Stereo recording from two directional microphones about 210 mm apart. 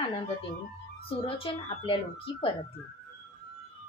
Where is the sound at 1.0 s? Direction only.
25° left (ahead or behind).